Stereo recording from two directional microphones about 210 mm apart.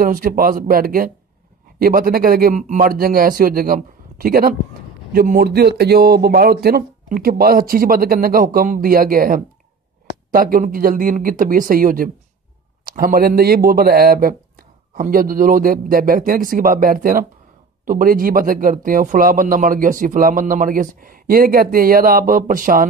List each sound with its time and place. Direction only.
0.0 s speech: 40° right (ahead or behind)